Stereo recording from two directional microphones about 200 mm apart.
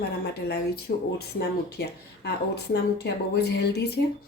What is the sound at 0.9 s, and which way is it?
Speech, 45° left (ahead or behind).